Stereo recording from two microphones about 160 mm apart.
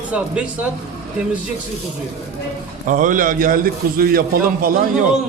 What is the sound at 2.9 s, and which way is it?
A man's voice, 55° right (ahead or behind).